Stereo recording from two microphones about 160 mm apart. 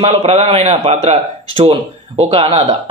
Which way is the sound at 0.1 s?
40° right (ahead or behind).